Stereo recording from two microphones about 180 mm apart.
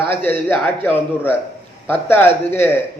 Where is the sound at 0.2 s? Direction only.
10° left (ahead or behind).